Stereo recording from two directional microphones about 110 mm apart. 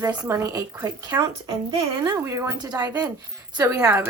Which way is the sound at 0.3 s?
25° right (ahead or behind).